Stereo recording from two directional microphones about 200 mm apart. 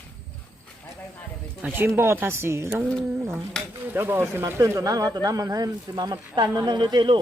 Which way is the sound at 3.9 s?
10° right (ahead or behind).